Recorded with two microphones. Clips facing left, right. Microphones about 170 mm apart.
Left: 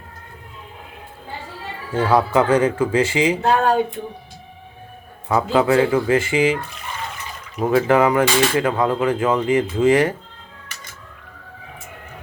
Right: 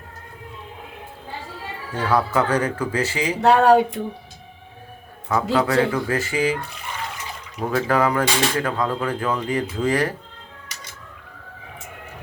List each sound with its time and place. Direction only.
2.0 s speech: 30° left (ahead or behind)
3.4 s a sound: 75° right (ahead or behind)
5.3 s a man's voice: 15° left (ahead or behind)
5.9 s speech: 25° left (ahead or behind)
7.7 s speech: 20° left (ahead or behind)